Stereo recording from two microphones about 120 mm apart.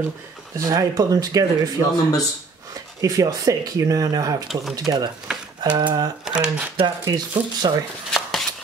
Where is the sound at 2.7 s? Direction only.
30° right (ahead or behind).